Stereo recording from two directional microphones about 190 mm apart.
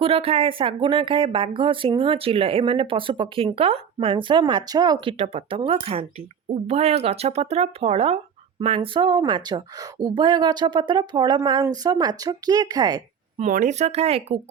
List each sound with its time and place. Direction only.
0.0 s speech: 30° right (ahead or behind)
13.4 s speech: 40° right (ahead or behind)